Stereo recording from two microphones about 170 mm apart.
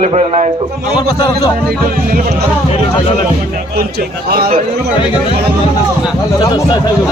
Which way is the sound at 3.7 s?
65° right (ahead or behind).